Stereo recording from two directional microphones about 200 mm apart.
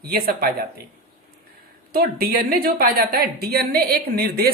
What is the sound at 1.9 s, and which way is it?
A woman's voice, 50° right (ahead or behind).